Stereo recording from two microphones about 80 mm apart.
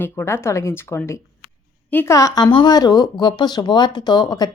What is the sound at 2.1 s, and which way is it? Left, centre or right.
Speech, left.